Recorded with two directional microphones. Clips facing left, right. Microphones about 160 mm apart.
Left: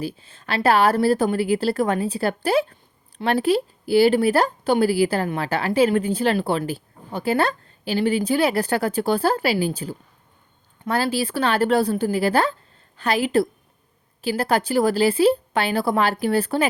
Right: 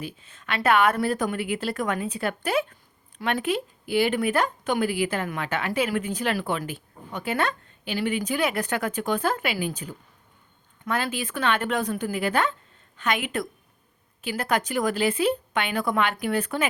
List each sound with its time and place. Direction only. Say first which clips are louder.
0.0 s speech: left 7 dB; 30° left (ahead or behind)